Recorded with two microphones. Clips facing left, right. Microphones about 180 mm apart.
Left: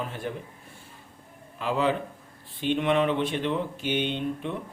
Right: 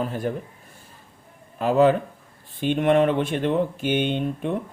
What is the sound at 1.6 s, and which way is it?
Speech, 45° right (ahead or behind).